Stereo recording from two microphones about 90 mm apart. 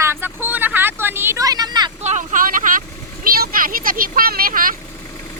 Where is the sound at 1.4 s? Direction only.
50° right (ahead or behind).